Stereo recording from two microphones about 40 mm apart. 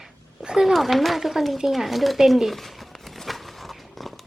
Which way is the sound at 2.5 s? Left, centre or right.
Centre.